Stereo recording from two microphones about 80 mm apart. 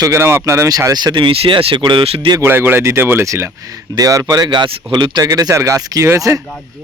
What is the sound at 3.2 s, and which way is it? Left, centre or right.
Speech, right.